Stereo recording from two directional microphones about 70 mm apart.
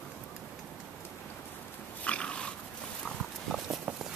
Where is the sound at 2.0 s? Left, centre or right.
Centre.